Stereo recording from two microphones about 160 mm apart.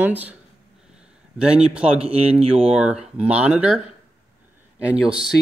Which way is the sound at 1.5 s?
5° right (ahead or behind).